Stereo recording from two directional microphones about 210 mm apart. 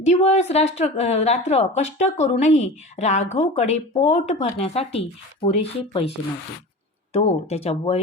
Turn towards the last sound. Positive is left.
turn(degrees=30)  # may be behind; listen again after turning